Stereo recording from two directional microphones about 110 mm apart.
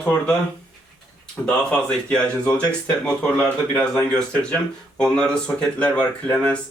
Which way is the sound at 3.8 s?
10° left (ahead or behind).